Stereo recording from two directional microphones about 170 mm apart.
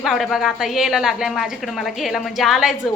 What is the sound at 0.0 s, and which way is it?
A woman's voice, centre (ahead or behind).